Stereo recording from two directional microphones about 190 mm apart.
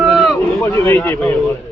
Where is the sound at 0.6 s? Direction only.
15° left (ahead or behind).